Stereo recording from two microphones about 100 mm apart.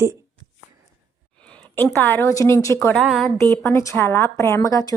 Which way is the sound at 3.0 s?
Centre (ahead or behind).